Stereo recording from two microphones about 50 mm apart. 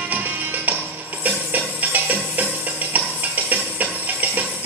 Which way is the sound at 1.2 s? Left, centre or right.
Right.